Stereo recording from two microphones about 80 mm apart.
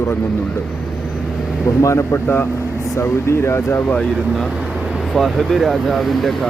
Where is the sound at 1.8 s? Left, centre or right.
Left.